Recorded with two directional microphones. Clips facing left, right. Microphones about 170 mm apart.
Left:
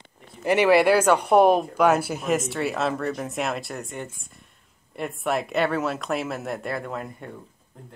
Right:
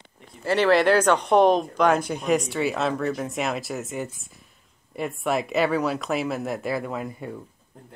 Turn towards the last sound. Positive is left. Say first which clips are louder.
# right 2 dB
turn(degrees=-5)  # may be behind; listen again after turning